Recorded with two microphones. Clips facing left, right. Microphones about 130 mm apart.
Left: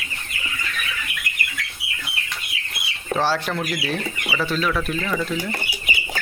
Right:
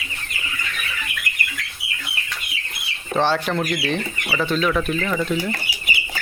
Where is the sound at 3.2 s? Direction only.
5° left (ahead or behind).